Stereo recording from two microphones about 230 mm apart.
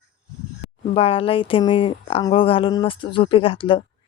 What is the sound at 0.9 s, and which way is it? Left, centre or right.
Speech, left.